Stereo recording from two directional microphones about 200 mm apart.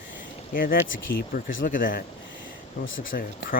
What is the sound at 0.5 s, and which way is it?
Speech, 45° left (ahead or behind).